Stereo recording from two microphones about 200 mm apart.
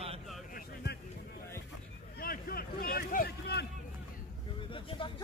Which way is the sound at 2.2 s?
50° left (ahead or behind).